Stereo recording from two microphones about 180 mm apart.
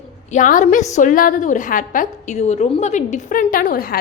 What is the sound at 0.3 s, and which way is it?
A woman's voice, 45° left (ahead or behind).